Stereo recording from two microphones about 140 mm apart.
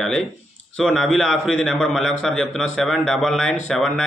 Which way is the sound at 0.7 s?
5° left (ahead or behind).